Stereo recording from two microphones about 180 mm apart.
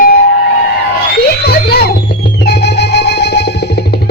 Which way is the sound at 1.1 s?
65° left (ahead or behind).